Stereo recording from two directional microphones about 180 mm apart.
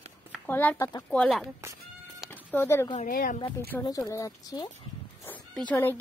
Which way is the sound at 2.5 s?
15° left (ahead or behind).